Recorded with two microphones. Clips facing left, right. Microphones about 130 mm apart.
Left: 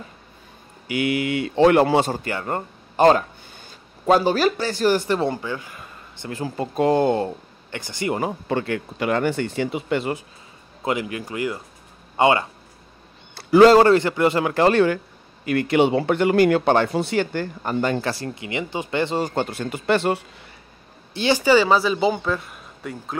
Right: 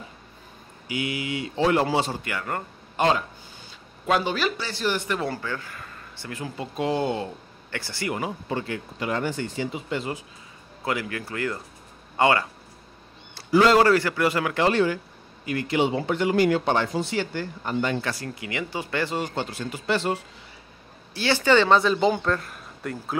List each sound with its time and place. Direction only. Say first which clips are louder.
0.8 s speech: left 7 dB; 60° left (ahead or behind)
2.2 s speech: left 4 dB; 30° left (ahead or behind)
5.3 s speech: left 3 dB; 15° left (ahead or behind)
6.3 s speech: left 7 dB; 40° left (ahead or behind)
7.7 s speech: left 4 dB; 20° left (ahead or behind)
8.5 s speech: left 5 dB; 65° left (ahead or behind)
10.8 s speech: left 4 dB; 20° left (ahead or behind)
13.3 s a sound: left 7 dB; 60° left (ahead or behind)
13.7 s speech: left 5 dB; 25° left (ahead or behind)
14.5 s speech: left 5 dB; 45° left (ahead or behind)
15.4 s speech: left 6 dB; 65° left (ahead or behind); by 18.1 s 40° left (ahead or behind)
18.1 s speech: left 4 dB; 25° left (ahead or behind)
19.3 s speech: left 5 dB; 55° left (ahead or behind)
21.1 s speech: left 3 dB; 20° left (ahead or behind); by 23.1 s centre (ahead or behind)